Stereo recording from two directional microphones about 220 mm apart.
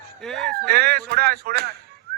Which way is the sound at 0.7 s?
45° right (ahead or behind).